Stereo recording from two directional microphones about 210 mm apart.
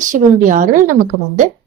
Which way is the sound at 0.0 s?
35° right (ahead or behind).